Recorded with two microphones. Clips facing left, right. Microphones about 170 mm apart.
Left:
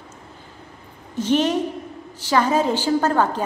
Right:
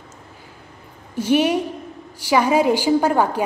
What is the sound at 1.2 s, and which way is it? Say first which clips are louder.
A woman's voice: right 2 dB; 10° right (ahead or behind).